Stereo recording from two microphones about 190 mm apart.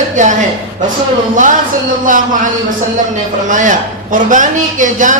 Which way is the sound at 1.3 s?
40° right (ahead or behind).